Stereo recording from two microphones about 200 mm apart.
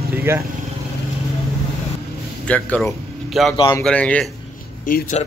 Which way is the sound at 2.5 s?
5° left (ahead or behind).